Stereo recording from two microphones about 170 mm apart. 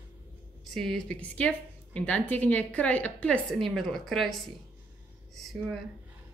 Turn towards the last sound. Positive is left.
turn(degrees=0)  # may be behind; listen again after turning